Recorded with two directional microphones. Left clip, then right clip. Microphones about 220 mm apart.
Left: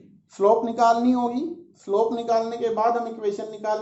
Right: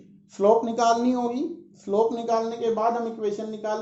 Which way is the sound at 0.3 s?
20° right (ahead or behind).